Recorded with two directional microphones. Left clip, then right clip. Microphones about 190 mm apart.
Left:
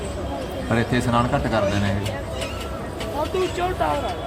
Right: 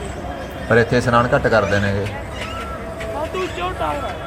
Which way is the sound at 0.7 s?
15° right (ahead or behind).